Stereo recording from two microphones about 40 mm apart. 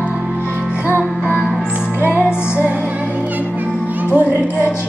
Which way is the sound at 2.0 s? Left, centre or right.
Left.